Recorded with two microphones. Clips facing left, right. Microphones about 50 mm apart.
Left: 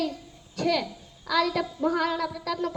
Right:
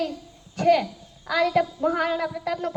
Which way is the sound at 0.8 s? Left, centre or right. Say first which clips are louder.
Right 2 dB; right.